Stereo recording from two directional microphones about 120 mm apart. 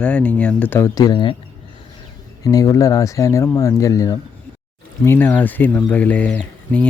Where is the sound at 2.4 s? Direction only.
30° left (ahead or behind).